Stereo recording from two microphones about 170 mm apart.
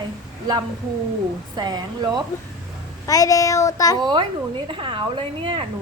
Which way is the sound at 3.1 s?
20° left (ahead or behind).